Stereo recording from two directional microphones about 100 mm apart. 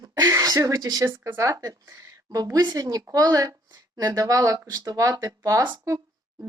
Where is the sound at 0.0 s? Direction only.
35° right (ahead or behind).